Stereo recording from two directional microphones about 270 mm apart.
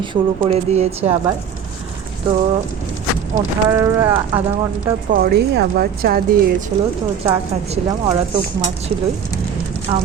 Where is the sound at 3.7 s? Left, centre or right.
Centre.